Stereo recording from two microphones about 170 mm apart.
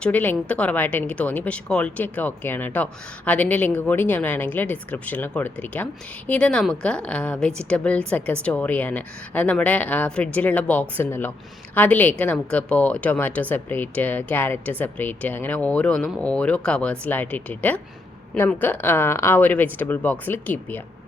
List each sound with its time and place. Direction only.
0.0 s a woman's voice: 10° left (ahead or behind)